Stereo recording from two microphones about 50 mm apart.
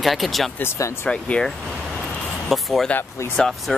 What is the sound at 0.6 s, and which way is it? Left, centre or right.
Speech, left.